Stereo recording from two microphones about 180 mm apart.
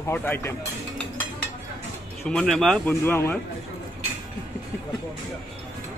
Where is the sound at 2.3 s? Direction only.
5° left (ahead or behind).